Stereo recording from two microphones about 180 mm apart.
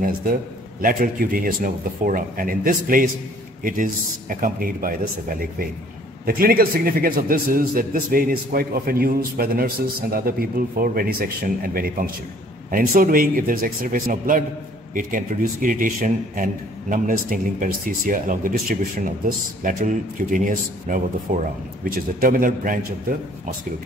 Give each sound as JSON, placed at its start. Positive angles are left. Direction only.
{"t": 0.0, "sound": "a man's voice", "side_deg": -50}